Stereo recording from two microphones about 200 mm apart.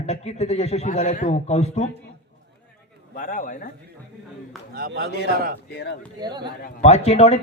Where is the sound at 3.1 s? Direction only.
40° left (ahead or behind).